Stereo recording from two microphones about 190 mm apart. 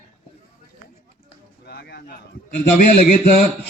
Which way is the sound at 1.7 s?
60° left (ahead or behind).